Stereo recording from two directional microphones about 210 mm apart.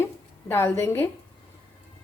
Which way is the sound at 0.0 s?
10° left (ahead or behind).